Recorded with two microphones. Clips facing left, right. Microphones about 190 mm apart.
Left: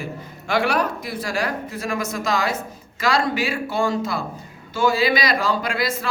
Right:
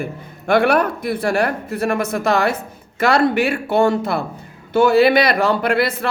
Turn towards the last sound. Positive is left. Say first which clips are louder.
# right 6 dB
turn(degrees=-60)  # may be behind; listen again after turning